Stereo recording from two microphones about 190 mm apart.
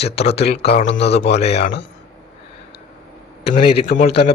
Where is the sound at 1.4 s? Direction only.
35° left (ahead or behind).